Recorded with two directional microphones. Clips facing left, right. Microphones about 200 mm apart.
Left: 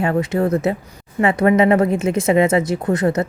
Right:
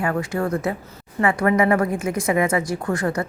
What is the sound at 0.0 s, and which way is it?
A woman's voice, 20° left (ahead or behind).